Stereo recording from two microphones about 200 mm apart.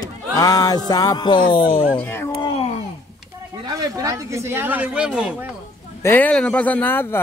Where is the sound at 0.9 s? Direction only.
20° left (ahead or behind).